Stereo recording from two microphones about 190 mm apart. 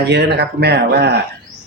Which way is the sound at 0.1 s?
60° right (ahead or behind).